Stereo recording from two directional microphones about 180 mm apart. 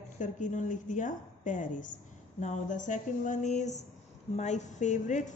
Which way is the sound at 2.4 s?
45° left (ahead or behind).